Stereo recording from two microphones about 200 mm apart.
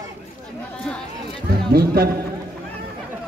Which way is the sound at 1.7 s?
50° right (ahead or behind).